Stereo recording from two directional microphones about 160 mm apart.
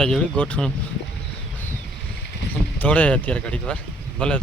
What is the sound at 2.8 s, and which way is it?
Speech, 10° left (ahead or behind).